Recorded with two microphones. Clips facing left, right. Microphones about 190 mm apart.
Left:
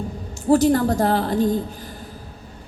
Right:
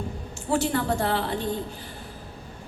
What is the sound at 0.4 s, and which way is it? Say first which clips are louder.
A woman's voice: left 9 dB; 40° left (ahead or behind).